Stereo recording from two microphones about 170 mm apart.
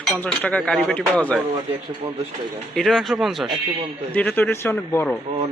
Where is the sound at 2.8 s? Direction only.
Centre (ahead or behind).